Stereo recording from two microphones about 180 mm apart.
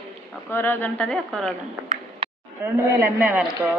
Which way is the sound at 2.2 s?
30° right (ahead or behind).